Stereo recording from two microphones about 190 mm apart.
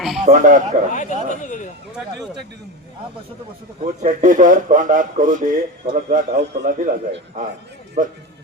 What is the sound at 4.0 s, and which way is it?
A man's voice, 40° right (ahead or behind).